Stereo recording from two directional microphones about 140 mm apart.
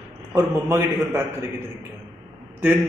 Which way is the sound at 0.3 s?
15° right (ahead or behind).